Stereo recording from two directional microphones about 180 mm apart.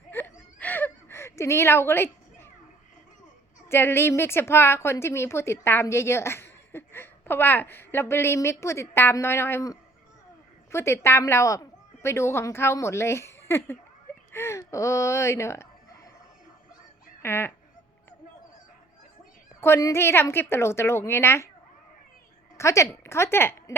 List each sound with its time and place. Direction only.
0.1 s whimper: 10° left (ahead or behind)
3.7 s a woman's voice: 15° left (ahead or behind)
17.2 s a woman's voice: 10° left (ahead or behind)
19.6 s a woman's voice: 15° left (ahead or behind)
22.5 s a woman's voice: 15° left (ahead or behind)